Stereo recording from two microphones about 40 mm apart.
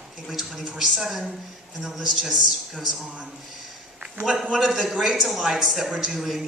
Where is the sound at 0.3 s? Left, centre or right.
Centre.